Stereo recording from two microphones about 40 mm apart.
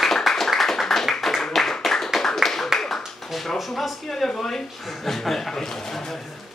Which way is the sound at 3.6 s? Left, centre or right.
Centre.